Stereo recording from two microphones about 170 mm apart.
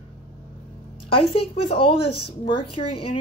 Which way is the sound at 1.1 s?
35° left (ahead or behind).